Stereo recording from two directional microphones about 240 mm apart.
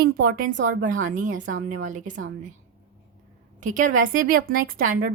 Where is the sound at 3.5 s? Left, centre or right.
Right.